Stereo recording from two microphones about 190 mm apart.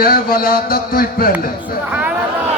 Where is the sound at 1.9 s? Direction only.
5° right (ahead or behind).